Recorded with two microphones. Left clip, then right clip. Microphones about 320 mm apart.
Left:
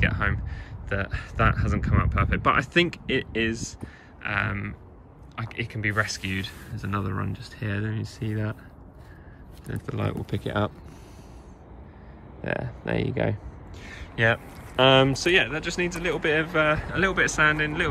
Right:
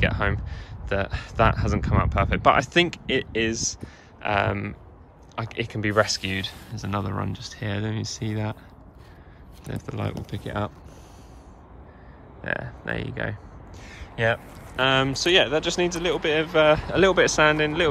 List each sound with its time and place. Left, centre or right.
0.0 s speech: centre
9.7 s speech: centre
12.4 s speech: centre
13.8 s speech: centre